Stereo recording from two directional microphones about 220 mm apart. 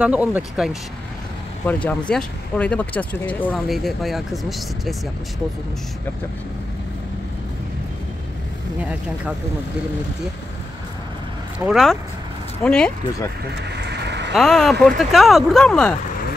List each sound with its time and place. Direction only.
0.0 s speech: 5° right (ahead or behind)
1.7 s speech: 5° left (ahead or behind)
11.6 s speech: centre (ahead or behind)
13.7 s a sound: 50° right (ahead or behind)
14.3 s speech: centre (ahead or behind)